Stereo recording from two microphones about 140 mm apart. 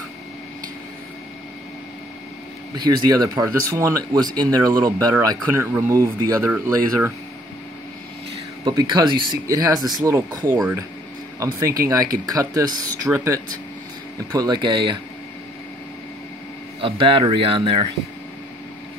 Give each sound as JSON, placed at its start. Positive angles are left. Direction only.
{"t": 2.7, "sound": "speech", "side_deg": -30}
{"t": 8.6, "sound": "speech", "side_deg": -30}
{"t": 11.6, "sound": "speech", "side_deg": -25}
{"t": 16.8, "sound": "speech", "side_deg": -40}